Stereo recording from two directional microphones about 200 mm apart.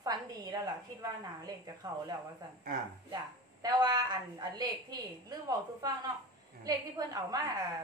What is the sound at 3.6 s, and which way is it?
A woman's voice, 20° right (ahead or behind).